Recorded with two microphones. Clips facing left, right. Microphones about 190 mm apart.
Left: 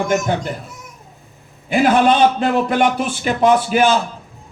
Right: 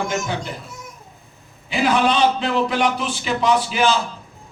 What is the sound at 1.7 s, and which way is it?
A man's voice, 55° left (ahead or behind).